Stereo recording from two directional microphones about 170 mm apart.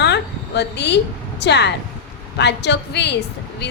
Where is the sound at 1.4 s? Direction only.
85° left.